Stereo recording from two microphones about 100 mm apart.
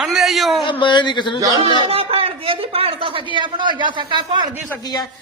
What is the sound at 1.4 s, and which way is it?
Speech, 35° right (ahead or behind).